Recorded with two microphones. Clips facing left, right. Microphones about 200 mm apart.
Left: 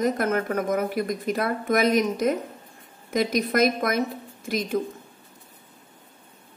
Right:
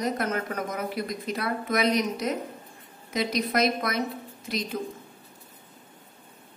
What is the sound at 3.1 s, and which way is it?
Speech, 50° left (ahead or behind).